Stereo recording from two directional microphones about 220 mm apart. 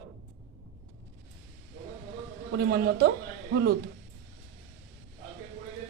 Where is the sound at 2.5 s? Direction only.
45° right (ahead or behind).